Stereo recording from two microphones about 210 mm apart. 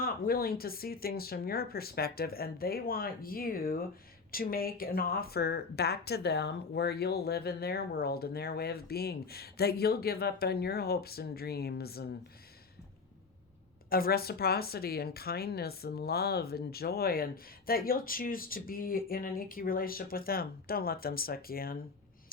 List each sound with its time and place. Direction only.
0.0 s a woman's voice: 45° left (ahead or behind)
13.9 s a woman's voice: 45° left (ahead or behind)